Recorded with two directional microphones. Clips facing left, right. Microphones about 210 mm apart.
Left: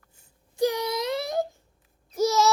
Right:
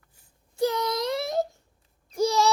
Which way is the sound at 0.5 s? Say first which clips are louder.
Left 1 dB; 15° left (ahead or behind).